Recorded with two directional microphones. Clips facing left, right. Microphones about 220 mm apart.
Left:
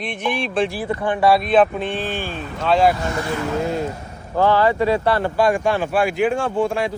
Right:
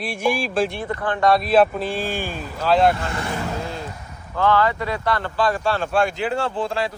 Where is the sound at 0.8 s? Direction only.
5° left (ahead or behind).